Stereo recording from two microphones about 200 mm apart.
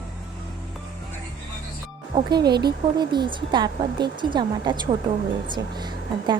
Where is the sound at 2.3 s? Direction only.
20° right (ahead or behind).